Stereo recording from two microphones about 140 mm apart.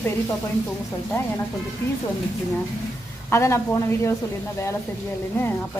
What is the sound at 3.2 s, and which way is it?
Speech, 20° left (ahead or behind).